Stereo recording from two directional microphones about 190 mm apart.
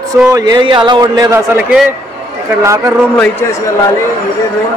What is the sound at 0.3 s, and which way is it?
A man's voice, 20° right (ahead or behind).